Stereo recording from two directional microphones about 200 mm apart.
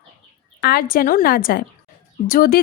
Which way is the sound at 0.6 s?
50° left (ahead or behind).